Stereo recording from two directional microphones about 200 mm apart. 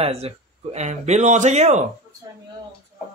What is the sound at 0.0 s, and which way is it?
Speech, 30° right (ahead or behind).